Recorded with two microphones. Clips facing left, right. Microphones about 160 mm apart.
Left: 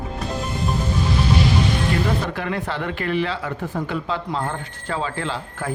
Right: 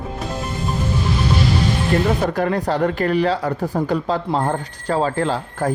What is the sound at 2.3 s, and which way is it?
Speech, 40° right (ahead or behind).